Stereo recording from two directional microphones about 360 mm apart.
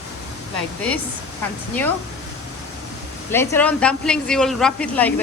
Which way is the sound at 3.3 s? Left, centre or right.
Centre.